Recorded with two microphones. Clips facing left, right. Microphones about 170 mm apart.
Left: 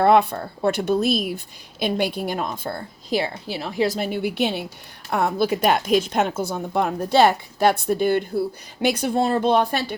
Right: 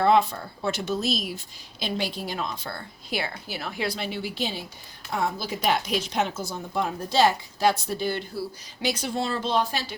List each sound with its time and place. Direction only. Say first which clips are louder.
0.0 s a woman's voice: left 4 dB; 60° left (ahead or behind)